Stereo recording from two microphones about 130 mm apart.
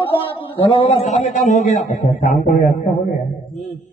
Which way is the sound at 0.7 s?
60° left (ahead or behind).